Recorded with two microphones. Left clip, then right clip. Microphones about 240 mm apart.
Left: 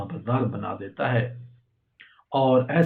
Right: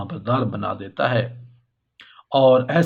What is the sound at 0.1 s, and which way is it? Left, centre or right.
Speech, right.